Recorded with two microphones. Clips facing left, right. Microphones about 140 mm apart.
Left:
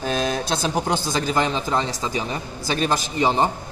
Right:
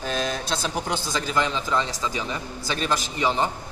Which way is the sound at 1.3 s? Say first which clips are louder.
Left 1 dB; 40° left (ahead or behind).